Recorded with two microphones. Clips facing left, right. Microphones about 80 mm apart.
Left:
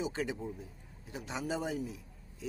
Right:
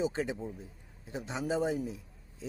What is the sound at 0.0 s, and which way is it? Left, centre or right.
A man's voice, right.